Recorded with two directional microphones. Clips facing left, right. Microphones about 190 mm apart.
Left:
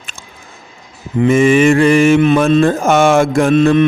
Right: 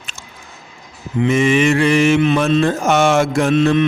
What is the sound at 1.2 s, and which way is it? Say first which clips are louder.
Mantra: left 5 dB; 50° left (ahead or behind).